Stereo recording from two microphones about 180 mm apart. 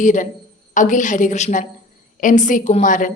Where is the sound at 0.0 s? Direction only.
45° left (ahead or behind).